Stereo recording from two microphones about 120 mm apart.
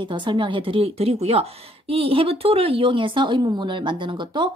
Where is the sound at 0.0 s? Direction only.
40° right (ahead or behind).